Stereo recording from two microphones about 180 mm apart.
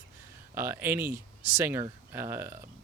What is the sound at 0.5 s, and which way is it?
Speech, 15° right (ahead or behind).